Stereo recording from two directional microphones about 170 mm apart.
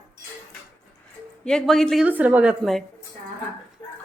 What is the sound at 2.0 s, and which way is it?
Speech, 10° right (ahead or behind).